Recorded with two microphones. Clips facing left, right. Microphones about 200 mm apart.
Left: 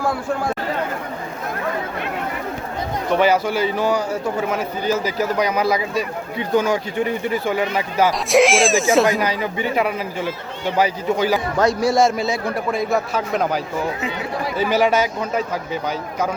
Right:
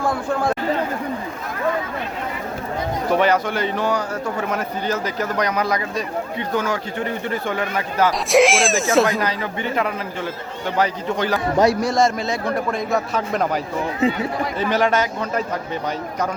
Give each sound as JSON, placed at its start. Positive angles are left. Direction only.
{"t": 3.1, "sound": "a man's voice", "side_deg": 5}
{"t": 9.0, "sound": "speech", "side_deg": 15}
{"t": 11.5, "sound": "a man's voice", "side_deg": -15}
{"t": 11.8, "sound": "a man's voice", "side_deg": 5}
{"t": 14.6, "sound": "a man's voice", "side_deg": 5}